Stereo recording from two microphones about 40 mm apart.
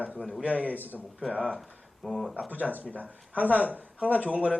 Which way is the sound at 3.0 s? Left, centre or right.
Right.